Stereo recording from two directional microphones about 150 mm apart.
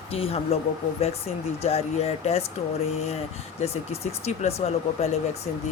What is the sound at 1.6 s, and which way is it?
Speech, 45° left (ahead or behind).